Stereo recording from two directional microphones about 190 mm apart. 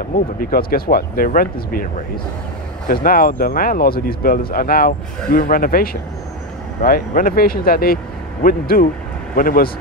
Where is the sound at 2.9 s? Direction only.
50° left (ahead or behind).